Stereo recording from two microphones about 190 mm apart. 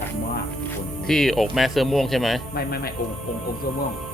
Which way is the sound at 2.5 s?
55° left (ahead or behind).